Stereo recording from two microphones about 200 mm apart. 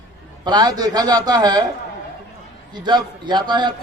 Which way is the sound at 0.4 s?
20° right (ahead or behind).